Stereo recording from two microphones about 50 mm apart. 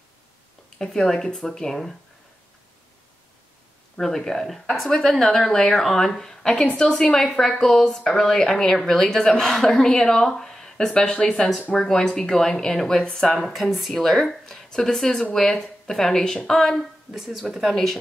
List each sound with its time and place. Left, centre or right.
0.7 s speech: centre
3.9 s speech: centre
11.0 s speech: left
13.4 s speech: centre
17.1 s speech: centre